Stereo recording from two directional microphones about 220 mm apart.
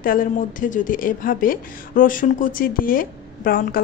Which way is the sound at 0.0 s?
40° left (ahead or behind).